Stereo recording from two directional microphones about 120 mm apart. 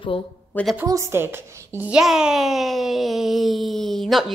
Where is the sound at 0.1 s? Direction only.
50° left (ahead or behind).